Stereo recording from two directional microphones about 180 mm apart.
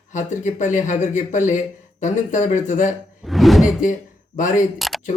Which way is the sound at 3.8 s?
45° left (ahead or behind).